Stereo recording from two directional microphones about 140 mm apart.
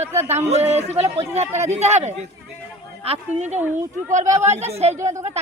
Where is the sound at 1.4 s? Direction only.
50° right (ahead or behind).